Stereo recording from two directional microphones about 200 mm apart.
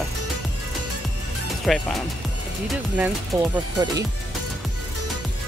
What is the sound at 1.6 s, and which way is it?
Speech, centre (ahead or behind).